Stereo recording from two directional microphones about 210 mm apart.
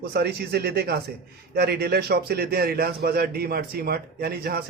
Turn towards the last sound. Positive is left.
turn(degrees=-50)  # may be behind; listen again after turning